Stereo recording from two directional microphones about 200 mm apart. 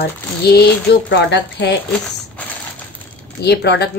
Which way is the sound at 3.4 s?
55° left (ahead or behind).